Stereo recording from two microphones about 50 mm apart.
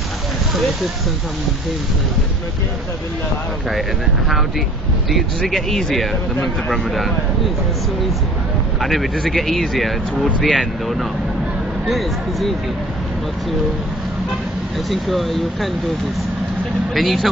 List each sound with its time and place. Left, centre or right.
4.3 s speech: centre
8.8 s speech: centre
14.9 s speech: centre
16.9 s speech: centre